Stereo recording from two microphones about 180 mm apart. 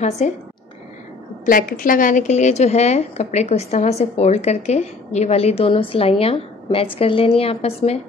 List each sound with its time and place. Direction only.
1.4 s a woman's voice: 50° left (ahead or behind); by 8.0 s 35° left (ahead or behind)